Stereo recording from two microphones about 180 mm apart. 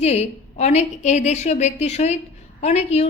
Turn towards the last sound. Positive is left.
turn(degrees=35)  # may be behind; listen again after turning